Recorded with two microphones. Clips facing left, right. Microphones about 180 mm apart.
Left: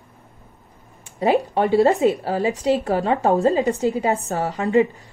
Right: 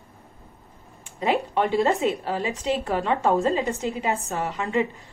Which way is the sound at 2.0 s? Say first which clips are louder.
Left 6 dB; 35° left (ahead or behind).